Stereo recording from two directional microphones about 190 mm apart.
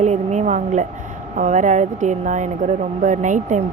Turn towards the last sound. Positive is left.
turn(degrees=-40)  # may be behind; listen again after turning